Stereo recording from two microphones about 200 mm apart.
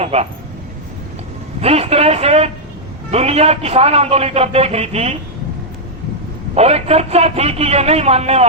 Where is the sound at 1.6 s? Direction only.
30° right (ahead or behind).